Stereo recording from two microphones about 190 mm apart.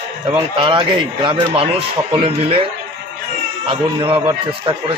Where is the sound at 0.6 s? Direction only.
25° right (ahead or behind).